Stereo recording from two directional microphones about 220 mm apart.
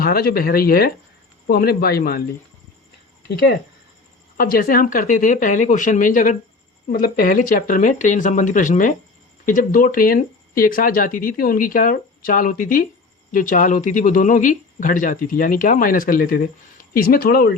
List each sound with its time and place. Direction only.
0.0 s speech: 45° left (ahead or behind)
3.2 s speech: 45° left (ahead or behind)